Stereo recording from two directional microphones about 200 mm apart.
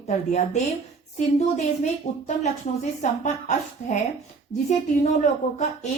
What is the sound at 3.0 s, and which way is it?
Speech, 35° left (ahead or behind).